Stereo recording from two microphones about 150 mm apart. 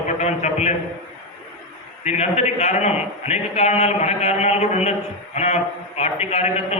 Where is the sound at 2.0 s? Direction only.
50° left (ahead or behind).